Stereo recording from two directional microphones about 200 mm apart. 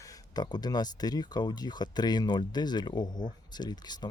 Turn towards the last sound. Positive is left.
turn(degrees=20)  # may be behind; listen again after turning